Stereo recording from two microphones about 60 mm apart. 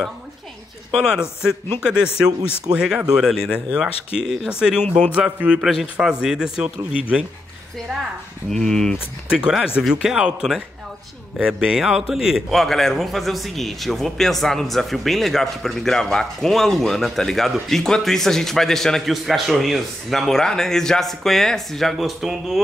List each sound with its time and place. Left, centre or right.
0.9 s a man's voice: centre
5.6 s a man's voice: centre
8.5 s speech: centre
9.3 s a man's voice: centre
12.4 s speech: centre
21.9 s a man's voice: centre